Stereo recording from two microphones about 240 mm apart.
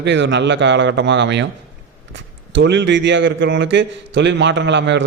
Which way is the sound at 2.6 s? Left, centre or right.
Right.